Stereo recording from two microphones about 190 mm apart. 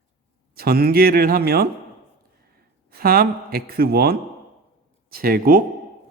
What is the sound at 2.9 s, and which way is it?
Speech, 50° right (ahead or behind).